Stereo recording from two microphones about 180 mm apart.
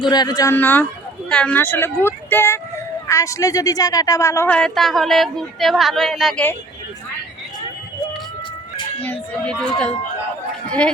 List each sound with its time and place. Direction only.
0.1 s speech: 20° left (ahead or behind); by 6.4 s centre (ahead or behind)
9.0 s speech: 10° left (ahead or behind)